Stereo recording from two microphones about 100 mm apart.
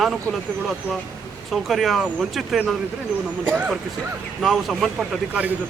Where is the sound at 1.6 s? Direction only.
Centre (ahead or behind).